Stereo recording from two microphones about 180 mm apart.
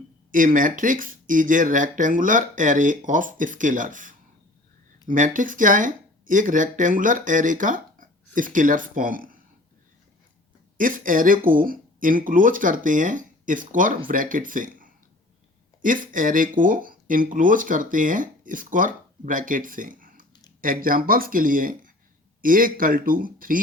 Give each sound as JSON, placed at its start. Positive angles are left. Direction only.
{"t": 0.3, "sound": "speech", "side_deg": -50}
{"t": 10.8, "sound": "speech", "side_deg": -50}